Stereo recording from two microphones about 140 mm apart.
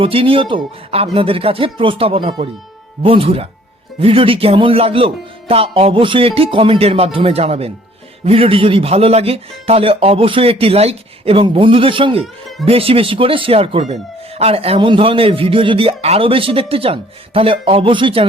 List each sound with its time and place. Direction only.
0.0 s speech: 40° right (ahead or behind)